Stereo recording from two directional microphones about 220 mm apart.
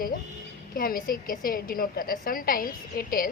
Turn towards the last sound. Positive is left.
turn(degrees=40)  # may be behind; listen again after turning